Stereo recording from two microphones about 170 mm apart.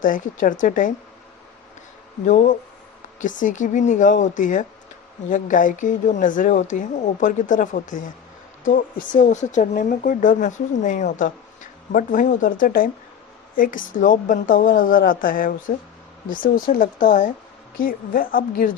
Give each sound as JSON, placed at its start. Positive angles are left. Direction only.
{"t": 0.0, "sound": "speech", "side_deg": 50}
{"t": 2.2, "sound": "a woman's voice", "side_deg": 50}